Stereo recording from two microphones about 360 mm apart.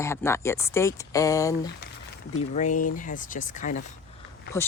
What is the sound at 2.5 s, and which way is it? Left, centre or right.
Speech, centre.